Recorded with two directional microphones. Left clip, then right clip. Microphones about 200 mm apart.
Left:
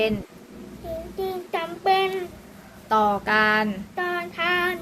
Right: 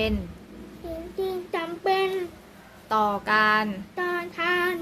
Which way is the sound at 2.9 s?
25° right (ahead or behind).